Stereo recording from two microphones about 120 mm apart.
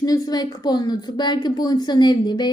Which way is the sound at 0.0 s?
30° left (ahead or behind).